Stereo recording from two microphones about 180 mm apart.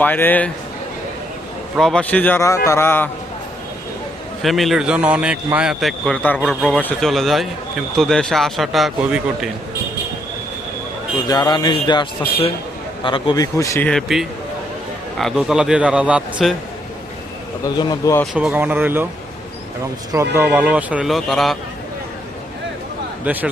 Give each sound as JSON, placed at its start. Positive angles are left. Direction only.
{"t": 0.0, "sound": "a man's voice", "side_deg": 10}
{"t": 1.7, "sound": "a man's voice", "side_deg": 5}
{"t": 4.4, "sound": "a man's voice", "side_deg": 0}
{"t": 11.3, "sound": "speech", "side_deg": 25}
{"t": 13.1, "sound": "a man's voice", "side_deg": 30}
{"t": 17.7, "sound": "speech", "side_deg": 20}
{"t": 18.3, "sound": "a man's voice", "side_deg": -10}
{"t": 20.1, "sound": "a man's voice", "side_deg": -10}
{"t": 23.2, "sound": "a man's voice", "side_deg": -10}